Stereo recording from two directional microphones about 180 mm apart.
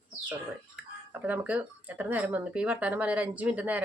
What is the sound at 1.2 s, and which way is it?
Speech, 10° right (ahead or behind).